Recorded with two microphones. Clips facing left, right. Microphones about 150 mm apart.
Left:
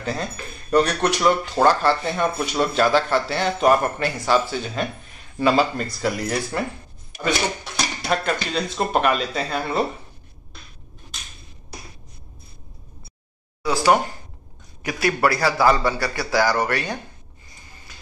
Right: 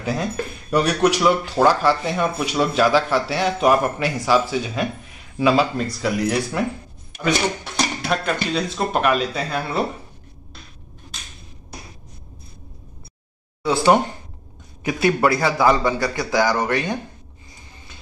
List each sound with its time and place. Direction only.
0.0 s speech: 5° right (ahead or behind)
8.0 s speech: centre (ahead or behind)
13.7 s a man's voice: 25° right (ahead or behind)